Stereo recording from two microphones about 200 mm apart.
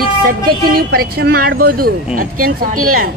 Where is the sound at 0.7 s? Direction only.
50° right (ahead or behind).